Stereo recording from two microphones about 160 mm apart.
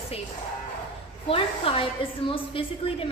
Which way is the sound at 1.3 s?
35° left (ahead or behind).